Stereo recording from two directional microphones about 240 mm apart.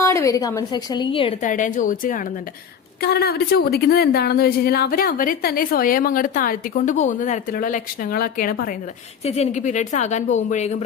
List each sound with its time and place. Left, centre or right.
0.0 s a woman's voice: centre; by 8.7 s left
9.2 s a woman's voice: left